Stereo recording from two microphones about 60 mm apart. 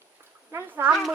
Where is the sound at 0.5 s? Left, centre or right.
Right.